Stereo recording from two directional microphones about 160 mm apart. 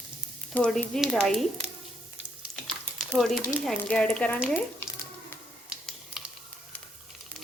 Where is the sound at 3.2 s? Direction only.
Centre (ahead or behind).